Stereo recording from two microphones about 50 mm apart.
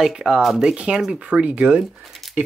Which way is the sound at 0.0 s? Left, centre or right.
Centre.